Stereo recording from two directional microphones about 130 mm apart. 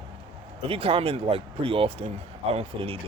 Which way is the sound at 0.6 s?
45° right (ahead or behind).